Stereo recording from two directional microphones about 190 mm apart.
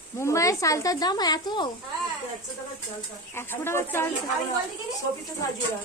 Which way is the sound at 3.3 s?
10° left (ahead or behind).